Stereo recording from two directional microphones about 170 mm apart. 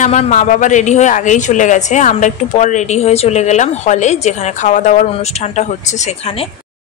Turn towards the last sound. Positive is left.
turn(degrees=35)  # may be behind; listen again after turning